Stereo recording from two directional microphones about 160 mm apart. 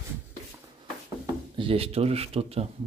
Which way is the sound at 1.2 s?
35° right (ahead or behind).